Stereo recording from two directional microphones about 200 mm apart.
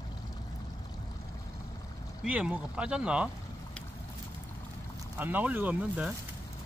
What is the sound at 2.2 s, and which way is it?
Speech, 5° right (ahead or behind).